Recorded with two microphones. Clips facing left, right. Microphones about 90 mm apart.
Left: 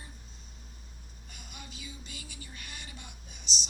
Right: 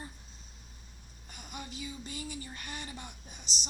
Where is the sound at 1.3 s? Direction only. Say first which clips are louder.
Right 5 dB; 30° right (ahead or behind).